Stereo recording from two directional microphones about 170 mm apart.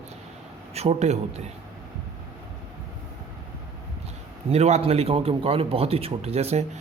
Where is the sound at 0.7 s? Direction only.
40° right (ahead or behind).